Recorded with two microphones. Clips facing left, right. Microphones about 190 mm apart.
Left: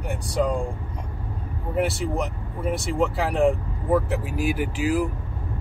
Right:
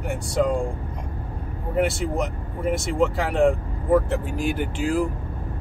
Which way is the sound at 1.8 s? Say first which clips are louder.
Right 2 dB; centre (ahead or behind).